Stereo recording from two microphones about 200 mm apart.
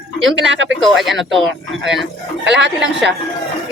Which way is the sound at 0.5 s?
65° right (ahead or behind).